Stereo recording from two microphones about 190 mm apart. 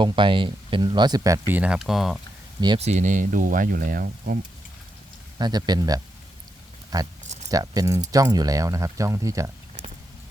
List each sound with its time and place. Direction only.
0.0 s speech: 25° right (ahead or behind); by 2.1 s centre (ahead or behind)
2.6 s speech: 25° right (ahead or behind)
2.8 s speech: 35° right (ahead or behind)
5.4 s speech: 20° right (ahead or behind)